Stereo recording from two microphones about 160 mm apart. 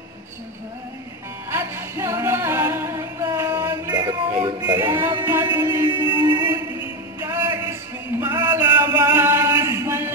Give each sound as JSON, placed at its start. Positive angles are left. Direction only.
{"t": 1.5, "sound": "music", "side_deg": -15}
{"t": 4.9, "sound": "music", "side_deg": -15}
{"t": 6.1, "sound": "music", "side_deg": -25}
{"t": 8.2, "sound": "a sound", "side_deg": -20}